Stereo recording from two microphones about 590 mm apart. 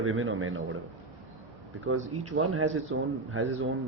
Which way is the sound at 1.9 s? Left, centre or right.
Right.